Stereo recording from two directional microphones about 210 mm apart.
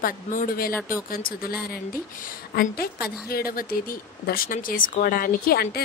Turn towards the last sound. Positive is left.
turn(degrees=50)  # may be behind; listen again after turning